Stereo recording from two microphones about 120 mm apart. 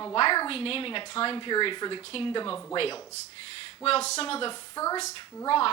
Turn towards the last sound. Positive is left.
turn(degrees=25)  # may be behind; listen again after turning